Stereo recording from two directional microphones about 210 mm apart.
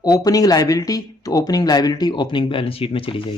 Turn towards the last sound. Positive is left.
turn(degrees=25)  # may be behind; listen again after turning